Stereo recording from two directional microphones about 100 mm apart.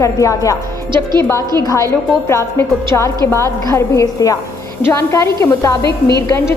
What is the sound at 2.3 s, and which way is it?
A woman's voice, 25° left (ahead or behind).